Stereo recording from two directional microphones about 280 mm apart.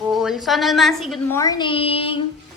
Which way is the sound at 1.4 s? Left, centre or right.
Centre.